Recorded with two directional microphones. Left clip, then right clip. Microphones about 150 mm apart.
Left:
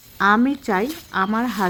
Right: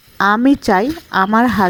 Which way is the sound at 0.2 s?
50° right (ahead or behind).